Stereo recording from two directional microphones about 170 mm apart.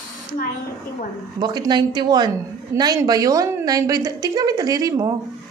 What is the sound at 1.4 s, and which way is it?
A woman's voice, 25° right (ahead or behind).